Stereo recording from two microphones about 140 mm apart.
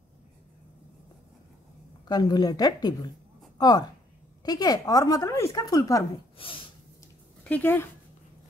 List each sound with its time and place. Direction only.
2.0 s speech: 30° left (ahead or behind)
6.3 s a sound: 40° left (ahead or behind)
7.4 s speech: 10° left (ahead or behind)